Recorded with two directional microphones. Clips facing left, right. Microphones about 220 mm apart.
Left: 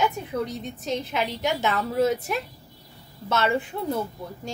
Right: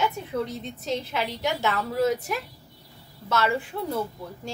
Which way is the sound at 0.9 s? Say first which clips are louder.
Left 1 dB; 20° left (ahead or behind).